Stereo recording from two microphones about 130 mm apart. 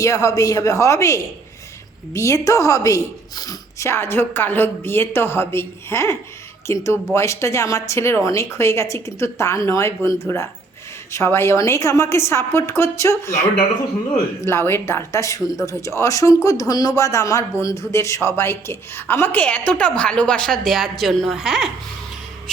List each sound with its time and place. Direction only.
0.0 s a woman's voice: 25° left (ahead or behind)
14.4 s a woman's voice: 20° left (ahead or behind); by 21.7 s centre (ahead or behind)